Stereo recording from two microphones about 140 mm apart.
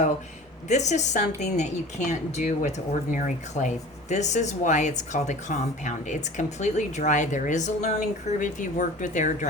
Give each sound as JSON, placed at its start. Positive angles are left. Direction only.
{"t": 0.7, "sound": "speech", "side_deg": 55}